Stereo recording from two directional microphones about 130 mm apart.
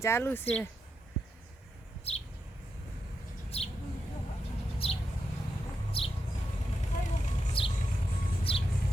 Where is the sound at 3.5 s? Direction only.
50° left (ahead or behind).